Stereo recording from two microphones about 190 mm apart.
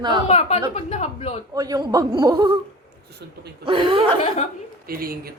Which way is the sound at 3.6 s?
25° right (ahead or behind).